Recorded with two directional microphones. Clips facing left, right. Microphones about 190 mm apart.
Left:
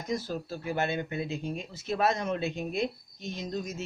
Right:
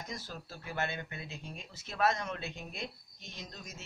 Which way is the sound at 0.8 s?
20° left (ahead or behind).